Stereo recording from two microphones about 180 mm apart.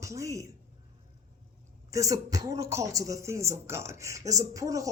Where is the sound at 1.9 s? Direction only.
20° right (ahead or behind).